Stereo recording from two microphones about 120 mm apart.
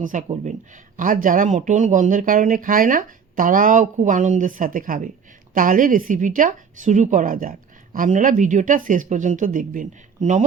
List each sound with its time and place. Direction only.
0.0 s speech: 90° right